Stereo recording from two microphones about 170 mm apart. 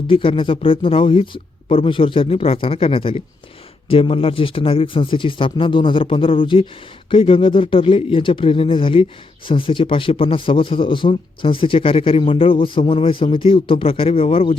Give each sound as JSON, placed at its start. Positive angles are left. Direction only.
{"t": 0.1, "sound": "a man's voice", "side_deg": 30}